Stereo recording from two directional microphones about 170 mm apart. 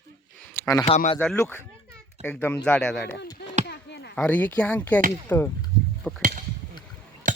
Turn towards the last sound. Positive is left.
turn(degrees=-50)  # may be behind; listen again after turning